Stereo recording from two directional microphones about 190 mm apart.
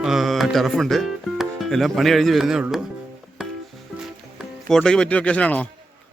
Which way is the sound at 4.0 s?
Centre (ahead or behind).